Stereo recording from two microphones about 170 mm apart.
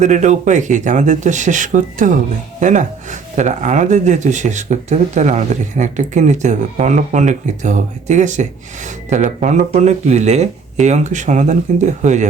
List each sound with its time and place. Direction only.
0.0 s speech: 45° right (ahead or behind)